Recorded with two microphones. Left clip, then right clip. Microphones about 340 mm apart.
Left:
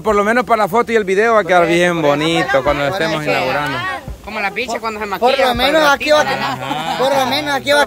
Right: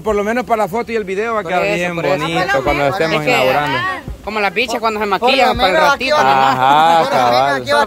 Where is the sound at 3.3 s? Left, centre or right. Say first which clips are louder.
Right 5 dB; right.